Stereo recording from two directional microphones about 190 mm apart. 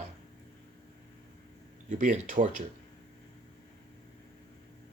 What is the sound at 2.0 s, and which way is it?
Speech, 40° right (ahead or behind).